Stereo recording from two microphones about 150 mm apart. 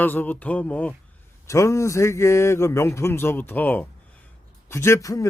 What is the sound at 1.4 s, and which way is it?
Speech, 20° left (ahead or behind).